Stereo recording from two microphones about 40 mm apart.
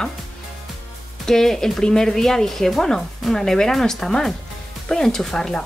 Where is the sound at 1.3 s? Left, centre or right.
Centre.